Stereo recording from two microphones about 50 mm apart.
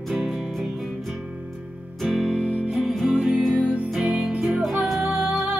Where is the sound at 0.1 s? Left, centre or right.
Centre.